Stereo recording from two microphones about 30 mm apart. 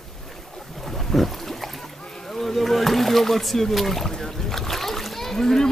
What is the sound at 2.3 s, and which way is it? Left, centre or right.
Rowboat, centre.